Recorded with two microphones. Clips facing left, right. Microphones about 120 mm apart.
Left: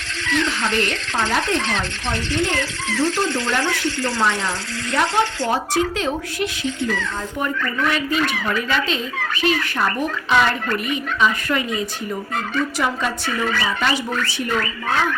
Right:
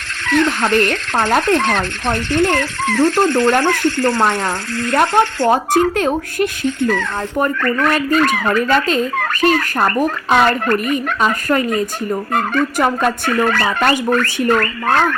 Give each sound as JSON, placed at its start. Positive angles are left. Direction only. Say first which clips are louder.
{"t": 0.3, "sound": "speech", "louder": "right 7 dB", "side_deg": -55}